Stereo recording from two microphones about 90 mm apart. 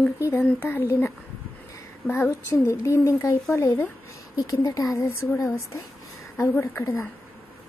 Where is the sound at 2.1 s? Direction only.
30° left (ahead or behind).